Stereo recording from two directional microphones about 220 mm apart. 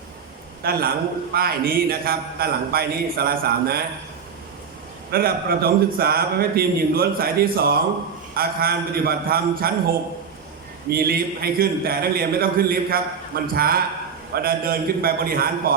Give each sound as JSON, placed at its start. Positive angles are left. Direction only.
{"t": 0.6, "sound": "a man's voice", "side_deg": -45}
{"t": 5.1, "sound": "a man's voice", "side_deg": -45}